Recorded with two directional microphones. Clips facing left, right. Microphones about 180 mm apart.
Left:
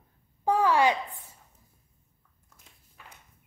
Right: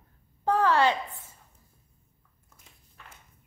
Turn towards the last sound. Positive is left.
turn(degrees=5)  # may be behind; listen again after turning